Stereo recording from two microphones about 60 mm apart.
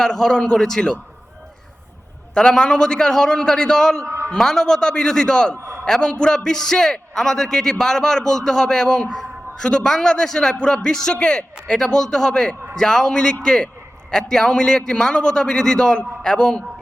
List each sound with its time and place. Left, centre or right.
0.0 s a man's voice: centre
2.3 s a man's voice: centre
4.0 s a sound: right
4.3 s a man's voice: centre